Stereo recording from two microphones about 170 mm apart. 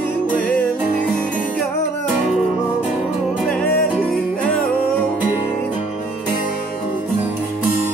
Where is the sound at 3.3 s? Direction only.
5° left (ahead or behind).